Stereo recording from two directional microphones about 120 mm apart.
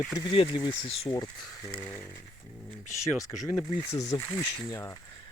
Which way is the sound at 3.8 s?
25° left (ahead or behind).